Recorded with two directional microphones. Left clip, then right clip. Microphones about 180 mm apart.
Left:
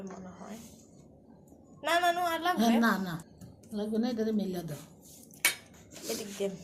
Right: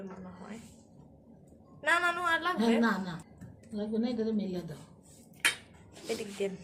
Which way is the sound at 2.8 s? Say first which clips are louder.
Left 2 dB; 40° left (ahead or behind).